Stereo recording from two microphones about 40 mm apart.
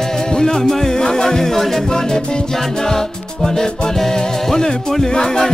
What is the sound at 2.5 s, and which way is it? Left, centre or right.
Music, centre.